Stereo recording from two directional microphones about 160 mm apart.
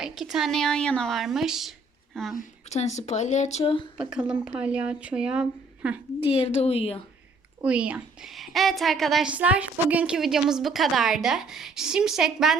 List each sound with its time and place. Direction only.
0.0 s a woman's voice: centre (ahead or behind)
2.3 s speech: 50° left (ahead or behind)
3.9 s speech: 5° right (ahead or behind)
6.2 s speech: 35° left (ahead or behind)
7.6 s a woman's voice: 5° right (ahead or behind)